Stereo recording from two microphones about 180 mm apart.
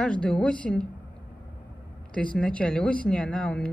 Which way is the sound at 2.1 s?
5° left (ahead or behind).